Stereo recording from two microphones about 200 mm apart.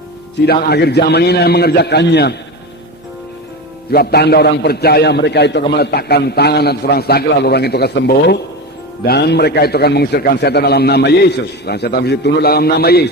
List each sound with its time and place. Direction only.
0.4 s a man's voice: 50° left (ahead or behind)
3.9 s a man's voice: 55° left (ahead or behind)